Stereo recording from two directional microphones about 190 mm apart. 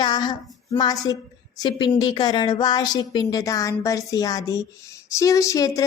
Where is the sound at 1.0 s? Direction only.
20° left (ahead or behind).